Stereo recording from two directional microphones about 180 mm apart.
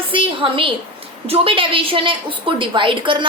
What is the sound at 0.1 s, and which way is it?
A woman's voice, 30° right (ahead or behind).